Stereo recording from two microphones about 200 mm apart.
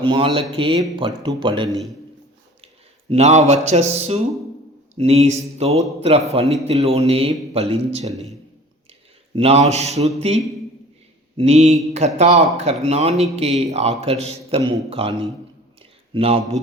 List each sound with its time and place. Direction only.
0.0 s speech: 25° right (ahead or behind)
3.1 s a man's voice: 35° right (ahead or behind)